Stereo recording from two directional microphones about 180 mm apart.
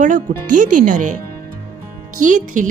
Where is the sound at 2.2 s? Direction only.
45° right (ahead or behind).